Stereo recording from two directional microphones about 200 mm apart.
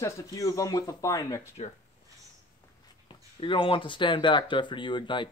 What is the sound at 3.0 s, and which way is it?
Speech, 25° left (ahead or behind).